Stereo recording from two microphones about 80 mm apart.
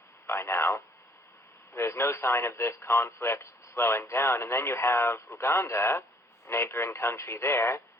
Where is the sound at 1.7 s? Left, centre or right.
Left.